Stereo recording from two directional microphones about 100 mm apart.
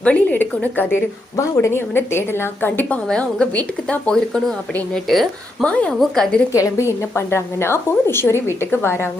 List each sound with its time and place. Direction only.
0.0 s a woman's voice: 15° left (ahead or behind)
3.1 s a woman's voice: 10° left (ahead or behind)
5.0 s speech: centre (ahead or behind)
5.6 s a woman's voice: 10° left (ahead or behind)
6.5 s a woman's voice: 30° left (ahead or behind)